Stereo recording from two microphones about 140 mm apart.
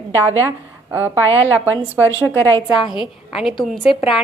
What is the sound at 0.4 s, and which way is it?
A woman's voice, 15° right (ahead or behind).